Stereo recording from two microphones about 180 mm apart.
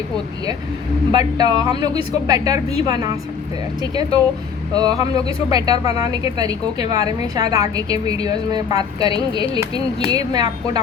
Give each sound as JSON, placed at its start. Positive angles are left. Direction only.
{"t": 1.1, "sound": "a woman's voice", "side_deg": -20}
{"t": 4.7, "sound": "a woman's voice", "side_deg": -20}